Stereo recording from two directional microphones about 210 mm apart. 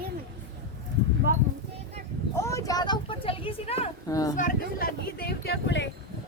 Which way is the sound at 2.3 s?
15° left (ahead or behind).